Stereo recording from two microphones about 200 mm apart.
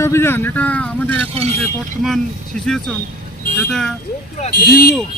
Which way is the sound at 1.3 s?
30° right (ahead or behind).